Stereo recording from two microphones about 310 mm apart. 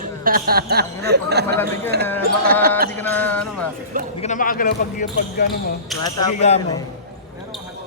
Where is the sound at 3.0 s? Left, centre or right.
Centre.